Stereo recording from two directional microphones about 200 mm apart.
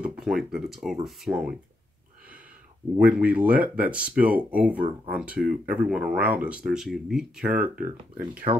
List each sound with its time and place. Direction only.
0.0 s speech: 5° right (ahead or behind)
3.0 s speech: 5° right (ahead or behind)
8.5 s speech: 25° right (ahead or behind)